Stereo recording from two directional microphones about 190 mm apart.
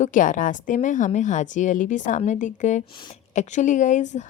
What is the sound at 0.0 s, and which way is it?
A woman's voice, 45° left (ahead or behind).